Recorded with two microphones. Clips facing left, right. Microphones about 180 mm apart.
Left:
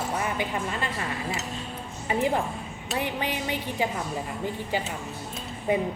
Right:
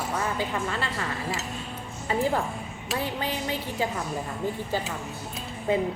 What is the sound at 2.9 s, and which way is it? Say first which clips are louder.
Speech: left 1 dB; 20° left (ahead or behind).